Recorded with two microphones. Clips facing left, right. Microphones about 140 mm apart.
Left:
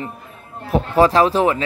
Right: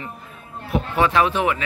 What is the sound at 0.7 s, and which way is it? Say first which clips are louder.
Speech: left 6 dB; 35° left (ahead or behind).